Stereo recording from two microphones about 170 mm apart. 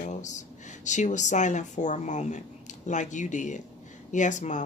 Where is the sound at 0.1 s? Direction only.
45° left (ahead or behind).